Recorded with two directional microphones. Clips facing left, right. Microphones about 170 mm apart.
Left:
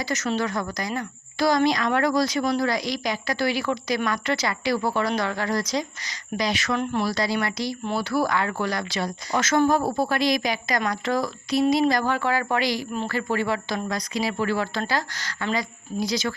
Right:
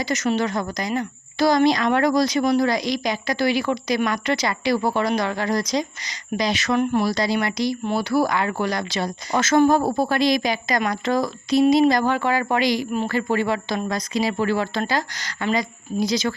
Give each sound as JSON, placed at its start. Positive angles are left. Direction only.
{"t": 0.0, "sound": "speech", "side_deg": -15}